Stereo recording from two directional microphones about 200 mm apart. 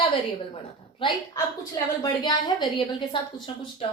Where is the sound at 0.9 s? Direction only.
25° left (ahead or behind).